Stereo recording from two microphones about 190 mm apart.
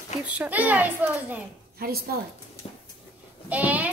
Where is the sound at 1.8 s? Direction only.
50° right (ahead or behind).